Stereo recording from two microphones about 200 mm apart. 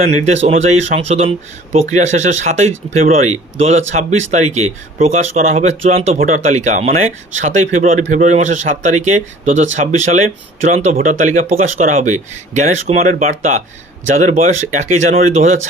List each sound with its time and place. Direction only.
0.2 s speech: 35° right (ahead or behind)